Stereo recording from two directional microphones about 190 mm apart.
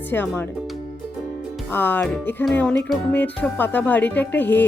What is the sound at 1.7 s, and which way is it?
Speech, 10° left (ahead or behind).